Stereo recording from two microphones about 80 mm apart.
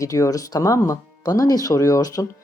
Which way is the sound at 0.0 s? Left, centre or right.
Left.